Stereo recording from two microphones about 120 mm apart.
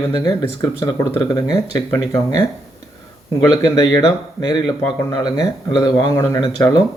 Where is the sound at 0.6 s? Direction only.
30° left (ahead or behind).